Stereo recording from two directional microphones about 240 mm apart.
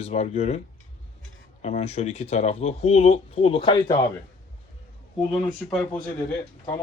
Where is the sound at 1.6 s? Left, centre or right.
Left.